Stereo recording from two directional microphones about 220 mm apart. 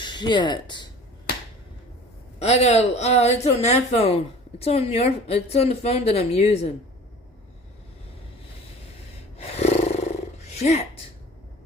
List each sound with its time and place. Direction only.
0.0 s speech: 20° left (ahead or behind)
2.4 s speech: 30° left (ahead or behind)
9.4 s gasp: 30° left (ahead or behind)
10.6 s speech: 30° left (ahead or behind)